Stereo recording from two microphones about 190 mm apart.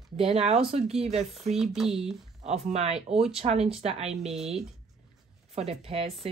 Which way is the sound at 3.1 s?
5° right (ahead or behind).